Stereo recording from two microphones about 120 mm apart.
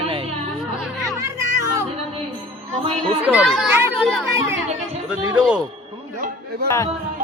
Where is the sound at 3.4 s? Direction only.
5° left (ahead or behind).